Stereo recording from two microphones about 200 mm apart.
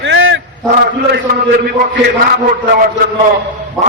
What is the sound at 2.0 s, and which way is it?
Speech, 50° right (ahead or behind).